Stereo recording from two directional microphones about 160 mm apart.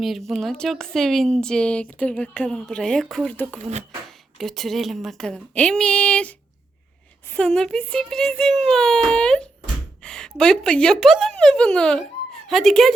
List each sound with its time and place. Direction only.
0.3 s speech: centre (ahead or behind)
3.6 s speech: 45° right (ahead or behind)
4.4 s a woman's voice: centre (ahead or behind)